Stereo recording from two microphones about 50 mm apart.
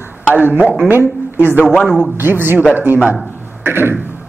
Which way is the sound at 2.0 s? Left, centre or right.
Right.